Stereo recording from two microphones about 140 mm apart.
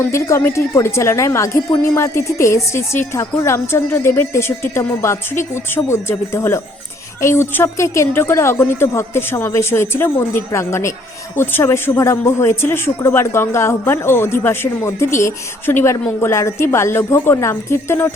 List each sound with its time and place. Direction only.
0.0 s a woman's voice: 20° left (ahead or behind)